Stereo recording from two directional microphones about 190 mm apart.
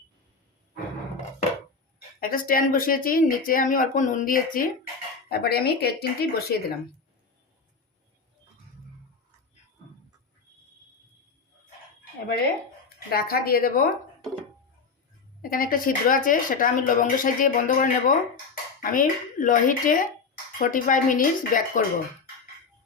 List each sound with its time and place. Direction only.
2.2 s speech: 50° left (ahead or behind)
5.3 s speech: 55° left (ahead or behind)
13.1 s speech: 50° left (ahead or behind)
15.4 s speech: 50° left (ahead or behind)